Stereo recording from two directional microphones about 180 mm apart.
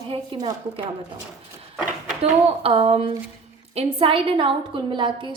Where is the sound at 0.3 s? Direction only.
20° right (ahead or behind).